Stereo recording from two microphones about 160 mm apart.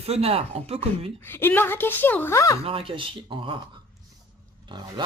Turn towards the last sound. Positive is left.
turn(degrees=-30)  # may be behind; listen again after turning